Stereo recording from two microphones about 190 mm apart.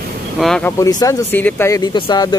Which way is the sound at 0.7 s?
20° left (ahead or behind).